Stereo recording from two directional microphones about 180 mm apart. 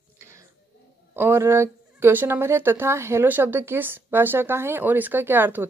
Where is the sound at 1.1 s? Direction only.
10° right (ahead or behind).